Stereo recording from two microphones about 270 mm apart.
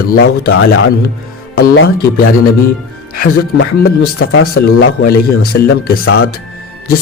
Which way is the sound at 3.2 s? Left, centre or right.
Left.